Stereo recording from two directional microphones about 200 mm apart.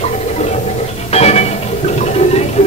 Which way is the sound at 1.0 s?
30° left (ahead or behind).